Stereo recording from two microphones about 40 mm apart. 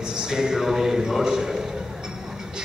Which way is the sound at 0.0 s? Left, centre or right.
Centre.